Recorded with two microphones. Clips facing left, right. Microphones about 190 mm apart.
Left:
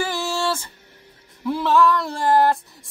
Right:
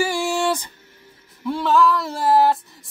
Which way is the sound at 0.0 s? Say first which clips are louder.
Right 3 dB; 15° right (ahead or behind).